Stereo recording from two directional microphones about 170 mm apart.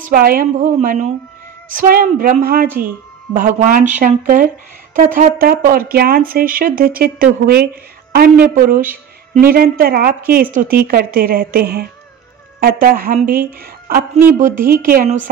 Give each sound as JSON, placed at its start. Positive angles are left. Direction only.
{"t": 0.0, "sound": "a woman's voice", "side_deg": -55}
{"t": 1.7, "sound": "a woman's voice", "side_deg": -55}